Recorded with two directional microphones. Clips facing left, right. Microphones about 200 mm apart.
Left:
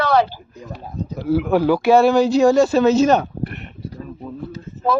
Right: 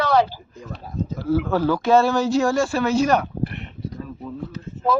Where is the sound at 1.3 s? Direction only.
15° left (ahead or behind).